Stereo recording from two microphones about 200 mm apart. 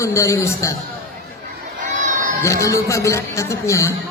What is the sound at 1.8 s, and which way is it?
Crowd, 40° right (ahead or behind).